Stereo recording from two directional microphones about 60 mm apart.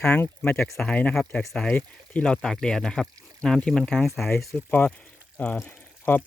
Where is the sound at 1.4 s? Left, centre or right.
Centre.